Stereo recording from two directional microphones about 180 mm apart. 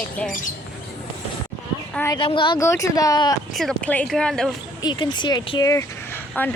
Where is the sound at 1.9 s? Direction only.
15° left (ahead or behind).